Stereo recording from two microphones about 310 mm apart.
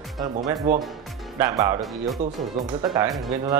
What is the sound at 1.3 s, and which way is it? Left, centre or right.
Speech, centre.